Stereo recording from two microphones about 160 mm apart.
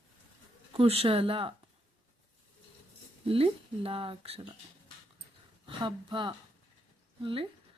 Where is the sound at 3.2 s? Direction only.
35° right (ahead or behind).